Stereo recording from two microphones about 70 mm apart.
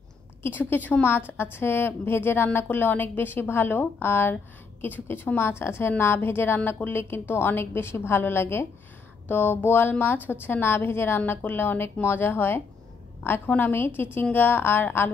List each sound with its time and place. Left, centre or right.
0.4 s a woman's voice: left